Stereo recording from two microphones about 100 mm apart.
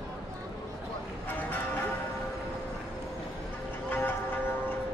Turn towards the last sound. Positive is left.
turn(degrees=20)  # may be behind; listen again after turning